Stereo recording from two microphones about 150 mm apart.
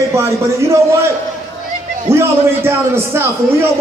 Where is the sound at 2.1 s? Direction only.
15° right (ahead or behind).